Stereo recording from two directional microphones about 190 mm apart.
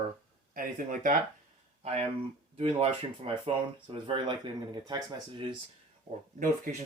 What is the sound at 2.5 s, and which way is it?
Speech, 30° right (ahead or behind).